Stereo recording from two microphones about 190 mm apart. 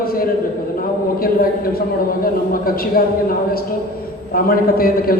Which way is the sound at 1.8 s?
50° left (ahead or behind).